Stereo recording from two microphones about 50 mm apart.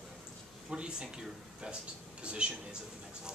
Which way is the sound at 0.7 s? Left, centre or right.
Centre.